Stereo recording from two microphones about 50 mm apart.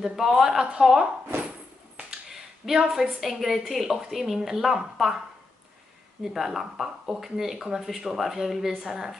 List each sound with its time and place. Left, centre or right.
0.0 s speech: centre
2.0 s finger snapping: right
2.9 s a woman's voice: centre
6.2 s speech: centre